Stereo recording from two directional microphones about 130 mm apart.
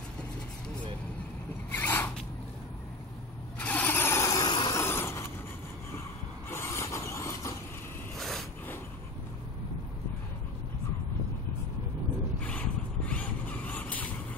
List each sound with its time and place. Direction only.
1.7 s a sound: 15° left (ahead or behind)
3.5 s vehicle: 10° left (ahead or behind); by 4.8 s 35° left (ahead or behind)
4.8 s vehicle: 20° left (ahead or behind)
6.5 s vehicle: 20° left (ahead or behind)
8.2 s a sound: centre (ahead or behind)
12.4 s vehicle: 10° left (ahead or behind)